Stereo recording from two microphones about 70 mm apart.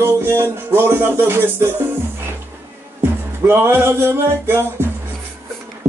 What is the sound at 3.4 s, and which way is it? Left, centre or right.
Music, right.